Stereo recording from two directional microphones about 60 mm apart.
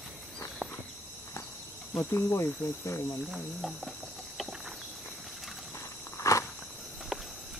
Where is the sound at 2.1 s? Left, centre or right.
Left.